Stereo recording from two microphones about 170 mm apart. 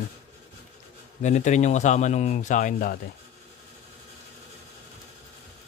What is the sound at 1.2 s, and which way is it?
Speech, 45° left (ahead or behind).